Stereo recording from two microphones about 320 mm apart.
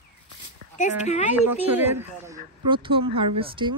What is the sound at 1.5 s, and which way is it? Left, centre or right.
Speech, centre.